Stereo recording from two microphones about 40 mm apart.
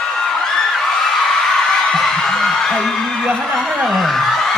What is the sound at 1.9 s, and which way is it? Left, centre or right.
Music, centre.